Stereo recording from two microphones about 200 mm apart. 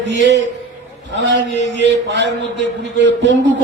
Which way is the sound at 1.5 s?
35° left (ahead or behind).